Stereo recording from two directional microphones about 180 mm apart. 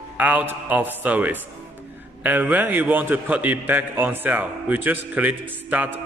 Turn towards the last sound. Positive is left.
turn(degrees=-10)  # may be behind; listen again after turning